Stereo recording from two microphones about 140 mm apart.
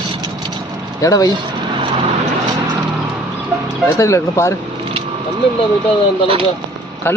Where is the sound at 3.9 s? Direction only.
20° left (ahead or behind).